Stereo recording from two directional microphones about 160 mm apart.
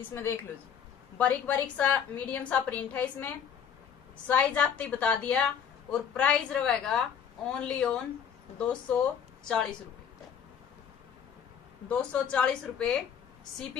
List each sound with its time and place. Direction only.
0.1 s a woman's voice: 15° left (ahead or behind)
4.3 s a woman's voice: 10° left (ahead or behind)
11.9 s a woman's voice: 10° left (ahead or behind)